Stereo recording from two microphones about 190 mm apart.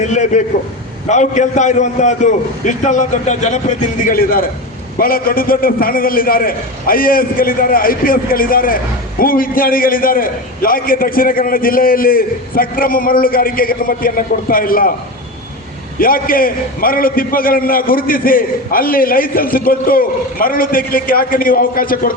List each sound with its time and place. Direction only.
0.0 s a man's voice: 40° left (ahead or behind)
4.0 s a man's voice: 50° left (ahead or behind)
16.0 s a man's voice: 50° left (ahead or behind)